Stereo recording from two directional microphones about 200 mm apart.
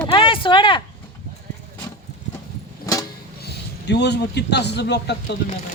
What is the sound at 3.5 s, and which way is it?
A man's voice, 55° left (ahead or behind).